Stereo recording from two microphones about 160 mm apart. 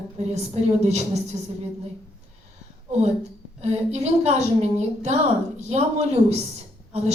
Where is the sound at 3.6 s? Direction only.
45° right (ahead or behind).